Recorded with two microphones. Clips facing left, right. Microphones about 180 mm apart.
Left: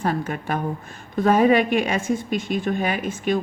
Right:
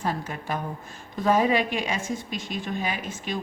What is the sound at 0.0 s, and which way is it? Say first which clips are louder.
A woman's voice: left 5 dB; 60° left (ahead or behind).